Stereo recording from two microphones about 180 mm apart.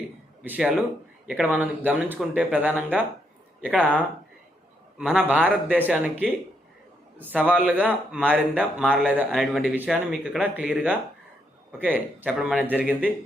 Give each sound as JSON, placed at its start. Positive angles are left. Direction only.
{"t": 0.4, "sound": "speech", "side_deg": -10}